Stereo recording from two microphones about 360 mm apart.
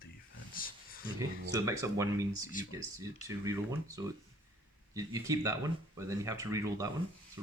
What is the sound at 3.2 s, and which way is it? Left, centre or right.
Speech, centre.